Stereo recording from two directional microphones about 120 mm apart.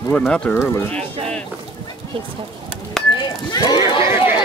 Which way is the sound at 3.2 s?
40° left (ahead or behind).